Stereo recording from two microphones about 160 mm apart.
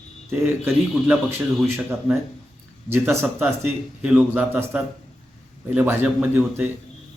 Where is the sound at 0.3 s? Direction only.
10° right (ahead or behind).